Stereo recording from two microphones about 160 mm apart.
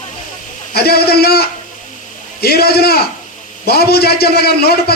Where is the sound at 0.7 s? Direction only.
80° left.